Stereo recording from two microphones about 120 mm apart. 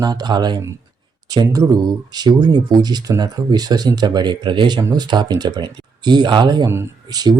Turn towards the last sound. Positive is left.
turn(degrees=-20)  # may be behind; listen again after turning